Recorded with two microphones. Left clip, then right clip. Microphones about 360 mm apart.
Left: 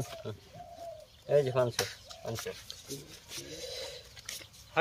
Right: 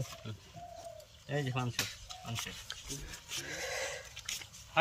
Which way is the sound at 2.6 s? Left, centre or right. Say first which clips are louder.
Even; centre.